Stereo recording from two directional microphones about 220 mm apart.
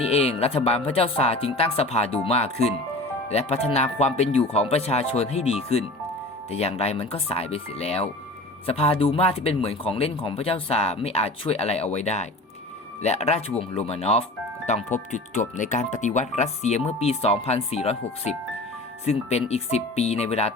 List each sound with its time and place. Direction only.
0.0 s speech: 25° left (ahead or behind)